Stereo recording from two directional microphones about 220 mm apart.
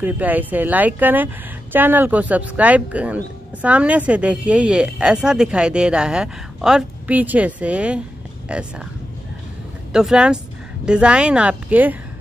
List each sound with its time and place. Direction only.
0.0 s speech: 5° right (ahead or behind)
9.9 s speech: 5° right (ahead or behind)